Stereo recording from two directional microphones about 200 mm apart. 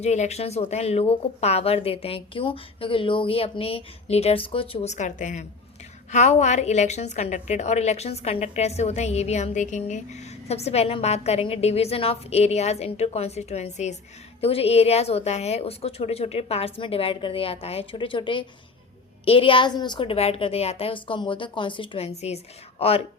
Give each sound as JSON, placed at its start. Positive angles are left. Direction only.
{"t": 0.0, "sound": "a woman's voice", "side_deg": 35}